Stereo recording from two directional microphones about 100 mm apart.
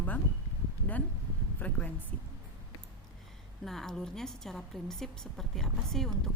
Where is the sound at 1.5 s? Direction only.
15° left (ahead or behind).